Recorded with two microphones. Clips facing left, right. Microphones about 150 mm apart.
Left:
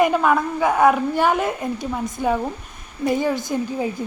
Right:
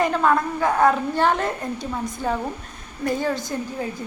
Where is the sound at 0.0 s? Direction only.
10° left (ahead or behind).